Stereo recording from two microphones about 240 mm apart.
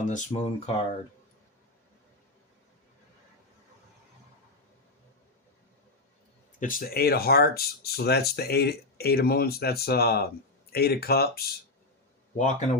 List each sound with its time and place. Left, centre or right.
0.1 s speech: left
6.6 s speech: left